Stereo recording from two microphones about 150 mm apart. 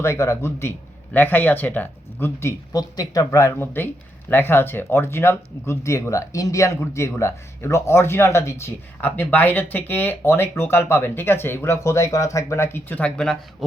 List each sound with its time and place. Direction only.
0.0 s speech: 15° left (ahead or behind)